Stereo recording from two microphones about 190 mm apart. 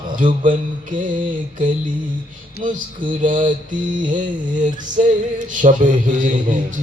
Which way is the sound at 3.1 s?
45° right (ahead or behind).